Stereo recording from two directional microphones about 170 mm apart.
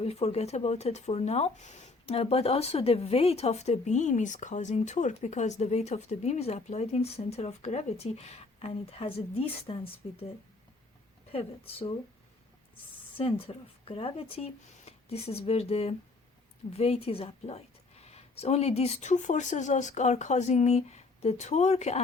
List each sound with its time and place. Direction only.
0.0 s speech: 40° left (ahead or behind)
11.3 s speech: 35° left (ahead or behind)
13.1 s speech: 35° left (ahead or behind)